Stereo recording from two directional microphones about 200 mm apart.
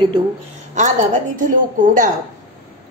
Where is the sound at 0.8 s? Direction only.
40° right (ahead or behind).